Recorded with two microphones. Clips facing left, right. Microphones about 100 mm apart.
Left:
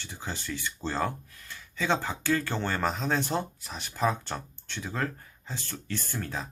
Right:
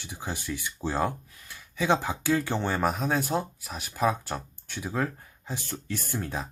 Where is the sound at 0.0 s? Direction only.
15° right (ahead or behind).